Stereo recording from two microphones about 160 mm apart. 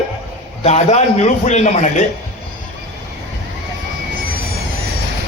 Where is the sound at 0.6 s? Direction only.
40° left (ahead or behind).